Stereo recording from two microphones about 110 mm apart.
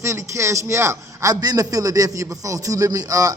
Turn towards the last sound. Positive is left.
turn(degrees=-35)  # may be behind; listen again after turning